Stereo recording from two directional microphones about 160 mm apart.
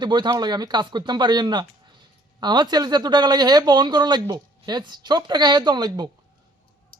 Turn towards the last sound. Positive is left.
turn(degrees=-25)  # may be behind; listen again after turning